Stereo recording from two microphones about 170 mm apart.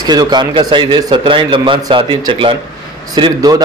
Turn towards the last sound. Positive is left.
turn(degrees=-25)  # may be behind; listen again after turning